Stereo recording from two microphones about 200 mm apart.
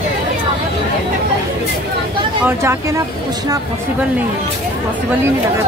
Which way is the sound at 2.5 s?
15° right (ahead or behind).